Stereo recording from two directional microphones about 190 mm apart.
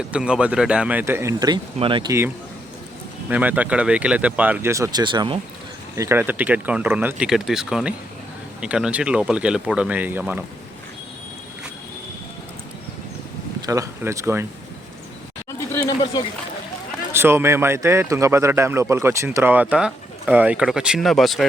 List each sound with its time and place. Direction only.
0.1 s a man's voice: 5° right (ahead or behind); by 2.1 s 25° right (ahead or behind)
3.2 s a man's voice: 10° right (ahead or behind); by 5.4 s 25° right (ahead or behind)
6.0 s a man's voice: 10° right (ahead or behind)
13.6 s speech: 15° right (ahead or behind)
17.1 s a man's voice: 10° right (ahead or behind)